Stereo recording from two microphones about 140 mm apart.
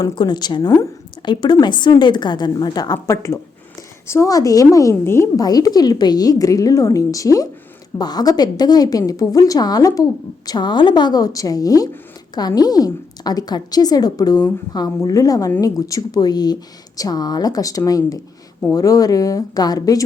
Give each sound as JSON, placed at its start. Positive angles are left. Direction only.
{"t": 0.0, "sound": "a woman's voice", "side_deg": 30}